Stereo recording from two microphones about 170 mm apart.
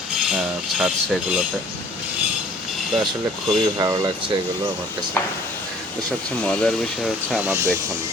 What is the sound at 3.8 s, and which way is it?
Speech, 25° right (ahead or behind).